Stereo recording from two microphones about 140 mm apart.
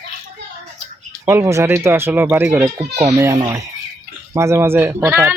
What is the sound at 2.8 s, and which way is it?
Speech, 50° right (ahead or behind).